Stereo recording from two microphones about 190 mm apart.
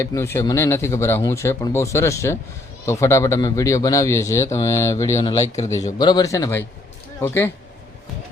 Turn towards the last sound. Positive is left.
turn(degrees=10)  # may be behind; listen again after turning